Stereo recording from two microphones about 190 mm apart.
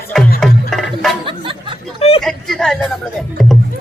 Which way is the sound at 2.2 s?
Centre (ahead or behind).